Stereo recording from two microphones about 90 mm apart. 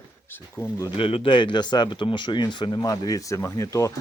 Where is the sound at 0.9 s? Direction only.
90° left; by 2.8 s 60° left (ahead or behind).